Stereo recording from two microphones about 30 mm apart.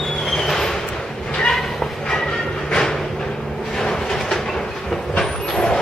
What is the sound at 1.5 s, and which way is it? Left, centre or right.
Train, centre.